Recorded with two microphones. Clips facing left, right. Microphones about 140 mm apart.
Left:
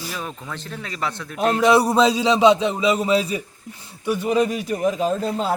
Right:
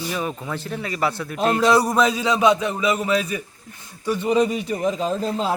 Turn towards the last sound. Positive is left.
turn(degrees=0)  # may be behind; listen again after turning